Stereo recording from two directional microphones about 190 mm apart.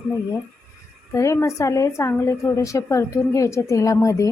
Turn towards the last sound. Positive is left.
turn(degrees=15)  # may be behind; listen again after turning